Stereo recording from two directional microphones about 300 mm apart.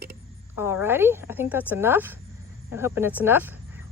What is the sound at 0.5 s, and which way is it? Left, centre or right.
Speech, centre.